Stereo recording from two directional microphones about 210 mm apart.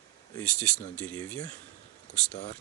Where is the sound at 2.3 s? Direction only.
30° left (ahead or behind).